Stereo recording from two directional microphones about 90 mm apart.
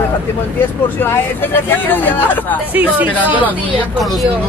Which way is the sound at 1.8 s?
20° left (ahead or behind).